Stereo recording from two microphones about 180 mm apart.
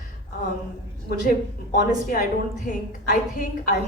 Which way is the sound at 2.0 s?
50° left (ahead or behind).